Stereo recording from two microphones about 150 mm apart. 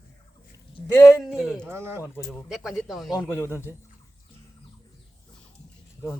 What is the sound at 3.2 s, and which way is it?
Speech, 15° left (ahead or behind).